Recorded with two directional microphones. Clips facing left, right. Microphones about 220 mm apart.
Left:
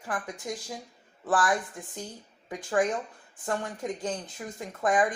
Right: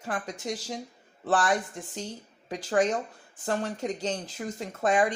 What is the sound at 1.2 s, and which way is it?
Speech, 25° right (ahead or behind).